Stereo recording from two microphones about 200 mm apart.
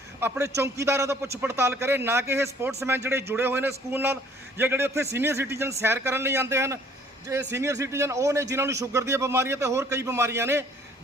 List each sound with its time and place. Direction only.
0.2 s a man's voice: 15° right (ahead or behind)